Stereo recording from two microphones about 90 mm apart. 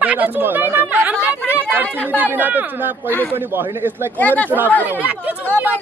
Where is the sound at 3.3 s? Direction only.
25° right (ahead or behind).